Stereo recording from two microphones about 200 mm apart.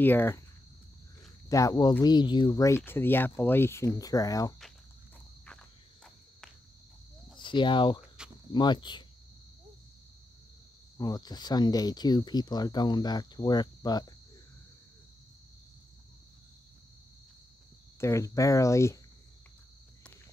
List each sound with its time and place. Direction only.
0.0 s speech: 10° left (ahead or behind)
1.5 s speech: 15° left (ahead or behind)
7.3 s speech: 25° left (ahead or behind)
11.0 s speech: 20° left (ahead or behind)
18.0 s speech: 15° left (ahead or behind)